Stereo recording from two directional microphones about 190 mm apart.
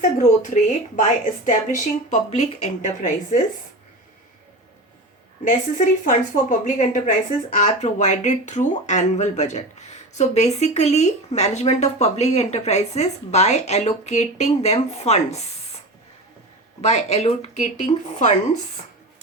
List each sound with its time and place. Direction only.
0.0 s a woman's voice: 40° left (ahead or behind)
5.5 s speech: 40° left (ahead or behind)
16.8 s speech: 35° left (ahead or behind)